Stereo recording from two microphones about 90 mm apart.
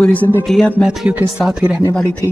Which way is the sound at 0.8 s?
5° right (ahead or behind).